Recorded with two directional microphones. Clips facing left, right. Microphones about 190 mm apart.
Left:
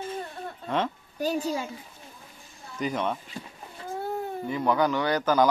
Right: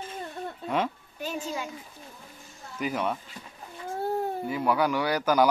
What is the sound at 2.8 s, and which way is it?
Speech, 5° right (ahead or behind).